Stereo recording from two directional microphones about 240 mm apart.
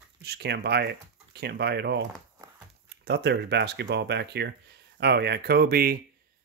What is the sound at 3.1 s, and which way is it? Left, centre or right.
Speech, right.